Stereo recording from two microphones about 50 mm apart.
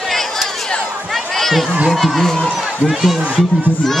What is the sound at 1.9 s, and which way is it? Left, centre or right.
Speech, centre.